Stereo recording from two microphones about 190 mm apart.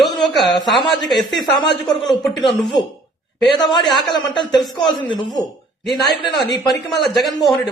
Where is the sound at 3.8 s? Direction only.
Centre (ahead or behind).